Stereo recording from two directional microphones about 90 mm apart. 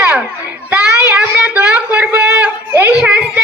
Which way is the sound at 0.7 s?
25° right (ahead or behind).